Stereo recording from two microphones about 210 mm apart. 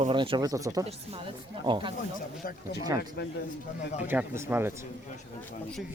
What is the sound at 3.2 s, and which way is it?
Speech, 55° left (ahead or behind).